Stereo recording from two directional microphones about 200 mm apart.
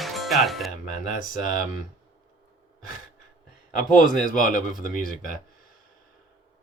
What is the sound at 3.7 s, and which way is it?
Speech, 40° left (ahead or behind).